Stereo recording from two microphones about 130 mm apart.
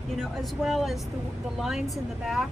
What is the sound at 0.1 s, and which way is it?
A woman's voice, centre (ahead or behind).